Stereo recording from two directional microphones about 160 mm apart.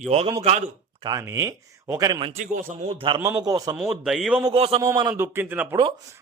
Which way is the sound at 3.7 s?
5° right (ahead or behind).